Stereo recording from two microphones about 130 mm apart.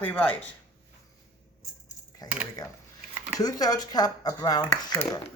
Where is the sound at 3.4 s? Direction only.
30° left (ahead or behind).